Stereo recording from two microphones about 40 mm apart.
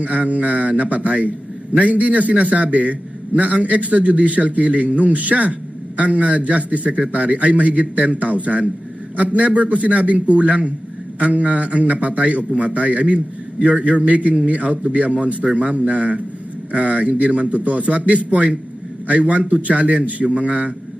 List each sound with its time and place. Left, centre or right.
0.0 s a man's voice: right